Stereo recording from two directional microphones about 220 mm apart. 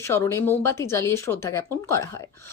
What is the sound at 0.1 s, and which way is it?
Speech, 10° left (ahead or behind).